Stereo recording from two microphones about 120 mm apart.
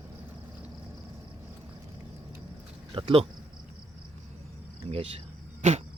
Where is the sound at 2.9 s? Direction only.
50° right (ahead or behind).